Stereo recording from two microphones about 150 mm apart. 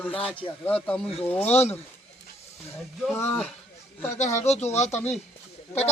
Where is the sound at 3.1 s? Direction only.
10° left (ahead or behind).